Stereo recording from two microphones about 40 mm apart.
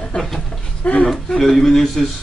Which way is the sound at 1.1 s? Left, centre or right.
Centre.